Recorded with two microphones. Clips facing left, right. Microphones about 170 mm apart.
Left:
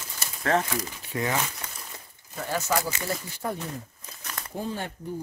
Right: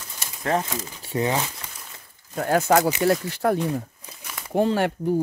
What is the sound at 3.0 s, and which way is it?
Speech, 75° right (ahead or behind).